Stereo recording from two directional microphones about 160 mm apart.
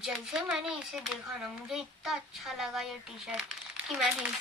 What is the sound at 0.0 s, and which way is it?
Speech, 5° right (ahead or behind).